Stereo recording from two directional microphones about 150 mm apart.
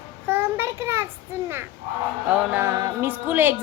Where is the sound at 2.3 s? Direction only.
15° right (ahead or behind).